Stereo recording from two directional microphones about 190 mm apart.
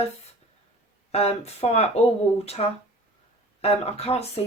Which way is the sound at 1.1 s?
35° left (ahead or behind).